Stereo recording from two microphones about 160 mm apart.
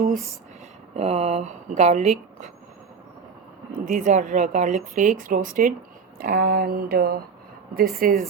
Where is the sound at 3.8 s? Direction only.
55° right (ahead or behind).